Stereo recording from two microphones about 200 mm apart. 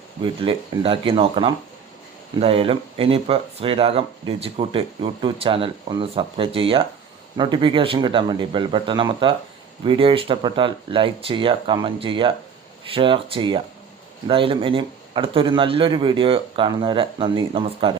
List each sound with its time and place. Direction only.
0.2 s speech: 25° right (ahead or behind)